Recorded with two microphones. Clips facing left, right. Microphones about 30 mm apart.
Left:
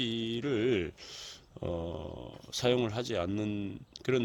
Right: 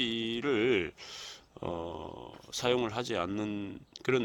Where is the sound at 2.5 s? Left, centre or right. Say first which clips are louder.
Left 1 dB; centre.